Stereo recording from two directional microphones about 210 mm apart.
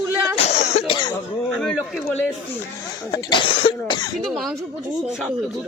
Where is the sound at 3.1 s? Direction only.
20° left (ahead or behind).